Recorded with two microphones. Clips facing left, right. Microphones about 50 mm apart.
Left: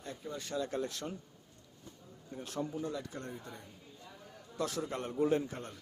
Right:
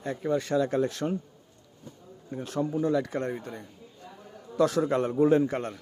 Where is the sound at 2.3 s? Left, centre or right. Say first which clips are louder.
Right 9 dB; right.